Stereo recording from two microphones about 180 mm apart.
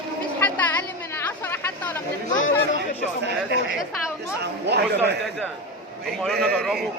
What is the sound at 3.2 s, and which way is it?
Speech, 70° right (ahead or behind).